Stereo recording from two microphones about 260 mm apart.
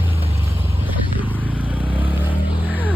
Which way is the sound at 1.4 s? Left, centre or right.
Centre.